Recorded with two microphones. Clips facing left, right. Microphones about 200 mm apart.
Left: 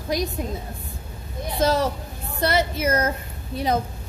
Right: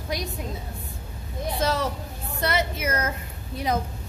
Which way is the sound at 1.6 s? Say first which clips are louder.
Left 6 dB; 40° left (ahead or behind).